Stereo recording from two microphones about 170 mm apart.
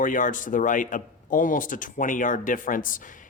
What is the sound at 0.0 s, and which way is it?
Speech, 50° left (ahead or behind).